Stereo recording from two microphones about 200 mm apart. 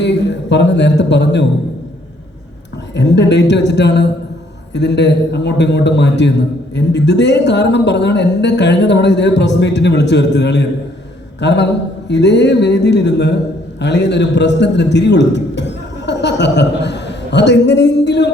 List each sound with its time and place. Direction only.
0.0 s a woman's voice: 60° left (ahead or behind)
2.9 s a woman's voice: 60° left (ahead or behind)